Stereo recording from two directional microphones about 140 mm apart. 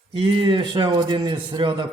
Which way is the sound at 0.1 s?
35° right (ahead or behind).